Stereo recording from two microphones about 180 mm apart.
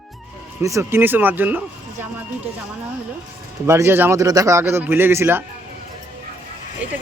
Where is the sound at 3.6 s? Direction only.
15° right (ahead or behind).